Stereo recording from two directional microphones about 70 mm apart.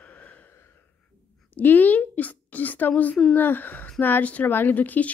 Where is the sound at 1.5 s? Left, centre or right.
Left.